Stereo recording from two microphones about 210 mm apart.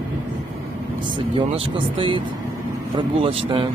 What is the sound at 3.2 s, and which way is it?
Speech, 20° right (ahead or behind).